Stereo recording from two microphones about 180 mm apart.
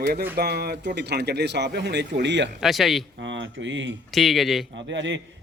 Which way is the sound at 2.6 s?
Centre (ahead or behind).